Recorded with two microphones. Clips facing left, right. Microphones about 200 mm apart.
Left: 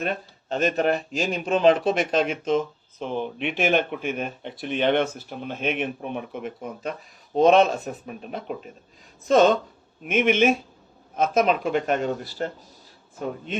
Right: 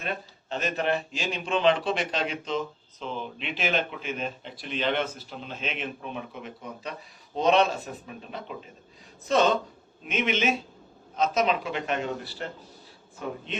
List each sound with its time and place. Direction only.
0.0 s speech: 45° left (ahead or behind)